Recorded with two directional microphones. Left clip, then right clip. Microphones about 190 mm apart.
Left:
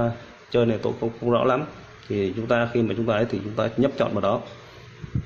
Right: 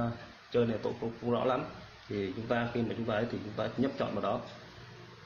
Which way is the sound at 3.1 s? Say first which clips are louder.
Left 10 dB; 50° left (ahead or behind).